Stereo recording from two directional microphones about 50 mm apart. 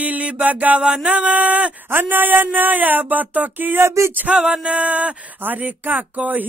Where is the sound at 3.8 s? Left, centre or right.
Right.